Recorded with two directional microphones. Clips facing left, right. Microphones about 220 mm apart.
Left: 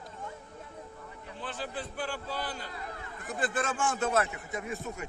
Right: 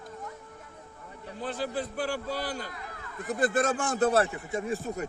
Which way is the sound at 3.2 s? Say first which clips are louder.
Right 6 dB; 40° right (ahead or behind).